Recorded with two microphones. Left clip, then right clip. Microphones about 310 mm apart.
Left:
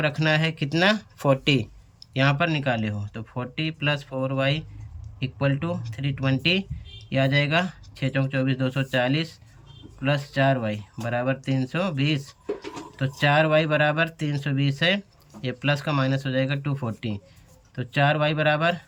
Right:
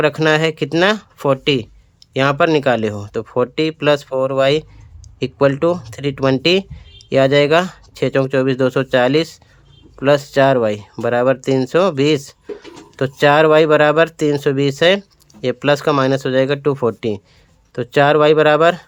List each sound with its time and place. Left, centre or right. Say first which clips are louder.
0.0 s speech: right 9 dB; centre